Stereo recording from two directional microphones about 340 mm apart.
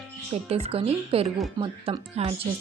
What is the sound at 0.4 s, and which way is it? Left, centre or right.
A woman's voice, centre.